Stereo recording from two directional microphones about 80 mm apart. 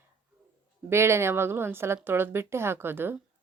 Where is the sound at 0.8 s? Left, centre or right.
Right.